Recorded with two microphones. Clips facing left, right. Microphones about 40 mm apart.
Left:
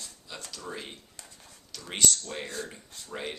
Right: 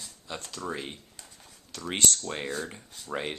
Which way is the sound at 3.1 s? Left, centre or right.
Right.